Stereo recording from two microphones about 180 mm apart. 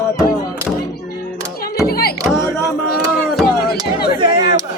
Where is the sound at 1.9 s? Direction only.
60° left (ahead or behind).